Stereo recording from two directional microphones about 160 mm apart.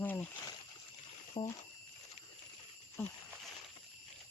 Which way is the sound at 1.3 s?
20° left (ahead or behind).